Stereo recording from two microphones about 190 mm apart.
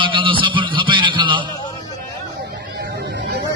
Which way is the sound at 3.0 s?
60° right (ahead or behind).